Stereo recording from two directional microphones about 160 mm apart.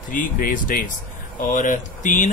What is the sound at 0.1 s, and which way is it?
Speech, 55° left (ahead or behind).